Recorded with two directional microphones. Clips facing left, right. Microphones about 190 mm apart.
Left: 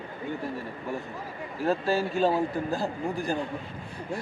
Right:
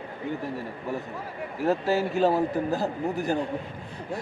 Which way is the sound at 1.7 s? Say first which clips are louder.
Right 2 dB; 20° right (ahead or behind).